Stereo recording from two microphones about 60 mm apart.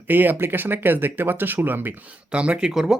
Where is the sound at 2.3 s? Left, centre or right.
Centre.